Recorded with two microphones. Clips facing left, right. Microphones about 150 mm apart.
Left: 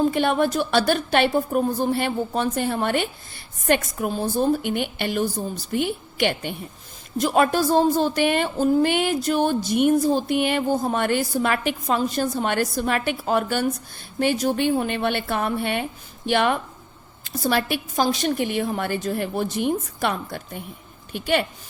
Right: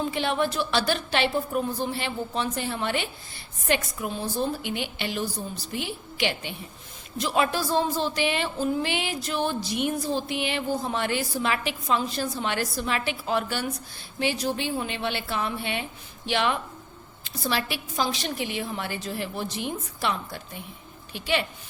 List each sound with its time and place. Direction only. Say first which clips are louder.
0.0 s a woman's voice: left 6 dB; 50° left (ahead or behind)